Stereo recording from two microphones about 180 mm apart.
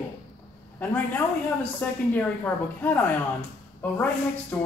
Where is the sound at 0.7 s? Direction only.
10° left (ahead or behind).